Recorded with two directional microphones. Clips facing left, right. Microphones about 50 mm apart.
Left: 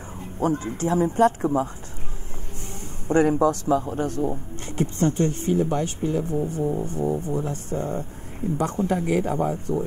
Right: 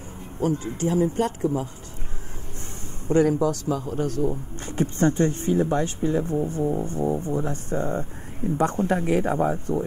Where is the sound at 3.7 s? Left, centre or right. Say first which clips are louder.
Left 3 dB; left.